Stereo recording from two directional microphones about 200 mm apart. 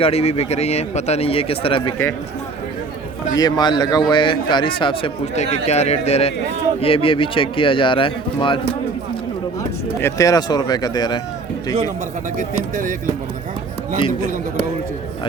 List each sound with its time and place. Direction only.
0.0 s speech: 30° left (ahead or behind)
3.3 s a man's voice: 20° left (ahead or behind)
10.0 s a man's voice: 15° left (ahead or behind)
12.7 s speech: 40° right (ahead or behind)